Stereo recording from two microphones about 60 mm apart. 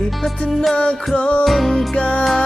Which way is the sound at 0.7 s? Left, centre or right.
Centre.